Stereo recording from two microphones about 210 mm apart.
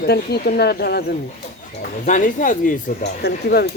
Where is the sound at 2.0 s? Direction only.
35° left (ahead or behind).